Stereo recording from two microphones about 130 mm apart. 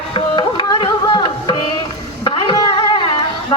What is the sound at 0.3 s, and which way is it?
Music, 35° left (ahead or behind).